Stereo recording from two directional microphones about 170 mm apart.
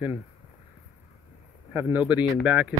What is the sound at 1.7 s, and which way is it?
Speech, 10° right (ahead or behind).